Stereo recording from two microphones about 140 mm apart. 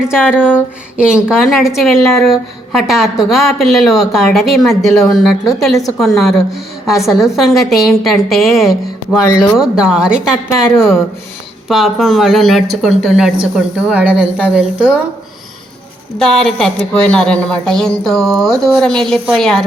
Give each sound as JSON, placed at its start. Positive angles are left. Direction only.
{"t": 0.0, "sound": "a woman's voice", "side_deg": -5}
{"t": 9.2, "sound": "speech", "side_deg": 25}
{"t": 9.6, "sound": "a woman's voice", "side_deg": -5}
{"t": 16.1, "sound": "a woman's voice", "side_deg": 5}